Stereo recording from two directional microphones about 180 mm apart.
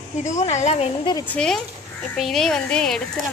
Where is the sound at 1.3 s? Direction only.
5° left (ahead or behind).